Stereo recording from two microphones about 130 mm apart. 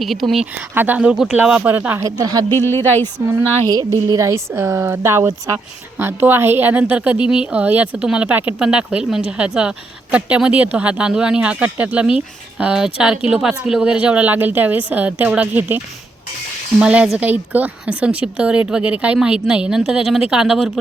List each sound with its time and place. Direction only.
0.0 s speech: centre (ahead or behind)
0.7 s speech: 15° right (ahead or behind)
2.0 s speech: 30° right (ahead or behind)
2.5 s speech: 15° left (ahead or behind)
4.1 s speech: 25° right (ahead or behind); by 20.7 s centre (ahead or behind)